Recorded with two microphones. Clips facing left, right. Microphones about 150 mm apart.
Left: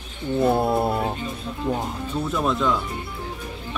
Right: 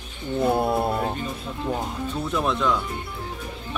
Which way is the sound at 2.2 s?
Centre (ahead or behind).